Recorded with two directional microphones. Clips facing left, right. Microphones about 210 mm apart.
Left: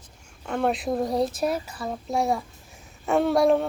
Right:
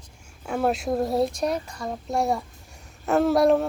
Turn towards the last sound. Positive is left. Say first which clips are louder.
# right 1 dB
turn(degrees=0)  # may be behind; listen again after turning